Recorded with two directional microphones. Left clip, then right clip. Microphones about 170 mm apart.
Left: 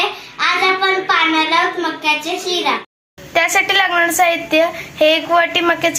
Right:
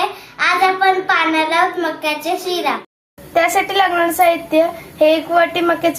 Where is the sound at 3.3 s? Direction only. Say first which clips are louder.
Left 1 dB; 5° right (ahead or behind).